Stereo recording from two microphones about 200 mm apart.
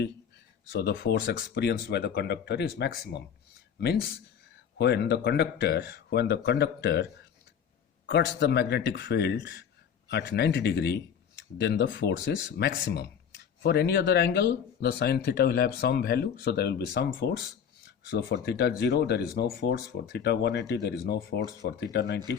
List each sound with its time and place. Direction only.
0.7 s speech: 55° left (ahead or behind)